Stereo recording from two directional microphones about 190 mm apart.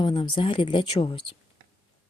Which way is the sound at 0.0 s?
25° left (ahead or behind).